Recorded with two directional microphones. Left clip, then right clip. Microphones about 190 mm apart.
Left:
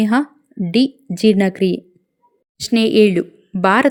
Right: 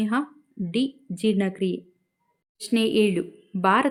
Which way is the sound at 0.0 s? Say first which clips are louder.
Left 9 dB; 35° left (ahead or behind).